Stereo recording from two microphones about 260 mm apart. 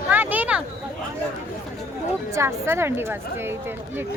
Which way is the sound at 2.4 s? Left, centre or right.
Centre.